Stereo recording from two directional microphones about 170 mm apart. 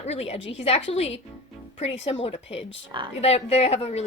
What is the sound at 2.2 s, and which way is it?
A woman's voice, 35° left (ahead or behind).